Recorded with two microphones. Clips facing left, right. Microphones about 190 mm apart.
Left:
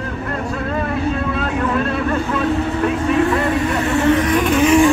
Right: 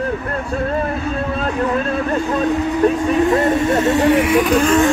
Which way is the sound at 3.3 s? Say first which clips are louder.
Right 3 dB; 45° right (ahead or behind).